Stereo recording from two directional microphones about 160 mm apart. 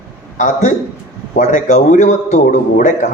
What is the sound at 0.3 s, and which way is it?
A man's voice, 50° left (ahead or behind).